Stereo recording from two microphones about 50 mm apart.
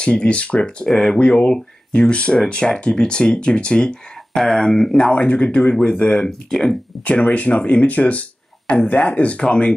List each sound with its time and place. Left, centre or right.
0.0 s speech: left
0.8 s speech: centre
7.1 s speech: left